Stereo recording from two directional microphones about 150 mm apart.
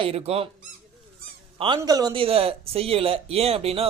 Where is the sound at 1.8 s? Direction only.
25° right (ahead or behind).